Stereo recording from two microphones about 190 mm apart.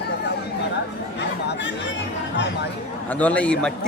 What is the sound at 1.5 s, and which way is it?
Speech, 65° left (ahead or behind).